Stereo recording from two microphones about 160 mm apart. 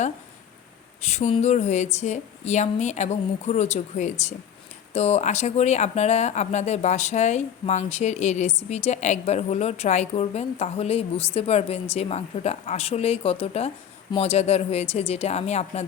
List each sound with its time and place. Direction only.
1.0 s speech: 45° left (ahead or behind)